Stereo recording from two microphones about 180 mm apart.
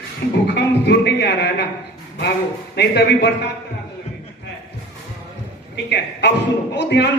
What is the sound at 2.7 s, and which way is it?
Speech, 70° left (ahead or behind).